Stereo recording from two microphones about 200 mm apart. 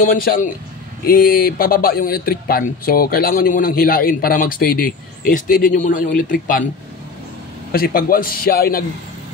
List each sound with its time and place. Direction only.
0.0 s speech: 45° left (ahead or behind)
7.7 s speech: 45° left (ahead or behind)